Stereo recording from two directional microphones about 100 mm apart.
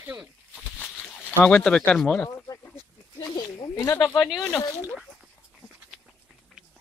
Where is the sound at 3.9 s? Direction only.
30° left (ahead or behind).